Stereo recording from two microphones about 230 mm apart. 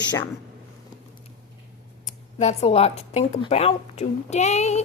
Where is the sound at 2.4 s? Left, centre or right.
Left.